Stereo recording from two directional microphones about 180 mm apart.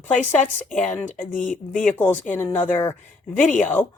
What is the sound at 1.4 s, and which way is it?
Speech, 45° left (ahead or behind).